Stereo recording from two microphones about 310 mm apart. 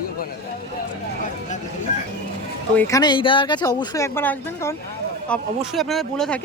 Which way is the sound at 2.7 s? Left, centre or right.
Centre.